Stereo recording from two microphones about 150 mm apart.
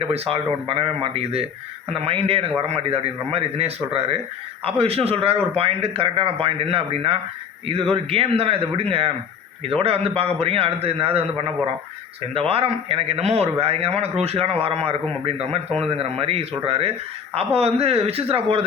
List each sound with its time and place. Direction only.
0.1 s a man's voice: 40° right (ahead or behind)